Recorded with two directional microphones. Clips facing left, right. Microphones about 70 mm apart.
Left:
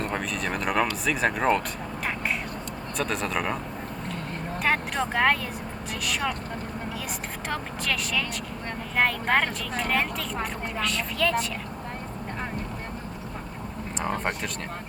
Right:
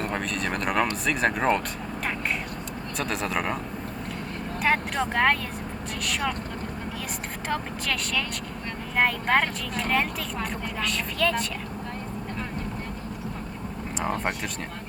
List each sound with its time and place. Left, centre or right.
0.0 s speech: centre
3.0 s speech: centre
4.6 s speech: centre
7.4 s speech: centre